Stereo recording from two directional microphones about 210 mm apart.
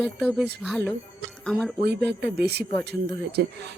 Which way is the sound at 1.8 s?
50° right (ahead or behind).